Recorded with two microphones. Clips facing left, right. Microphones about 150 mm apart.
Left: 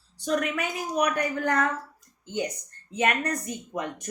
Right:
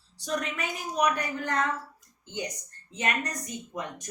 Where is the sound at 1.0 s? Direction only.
60° left (ahead or behind).